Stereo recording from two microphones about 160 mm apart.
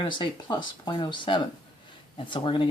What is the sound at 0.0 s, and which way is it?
Speech, 30° left (ahead or behind).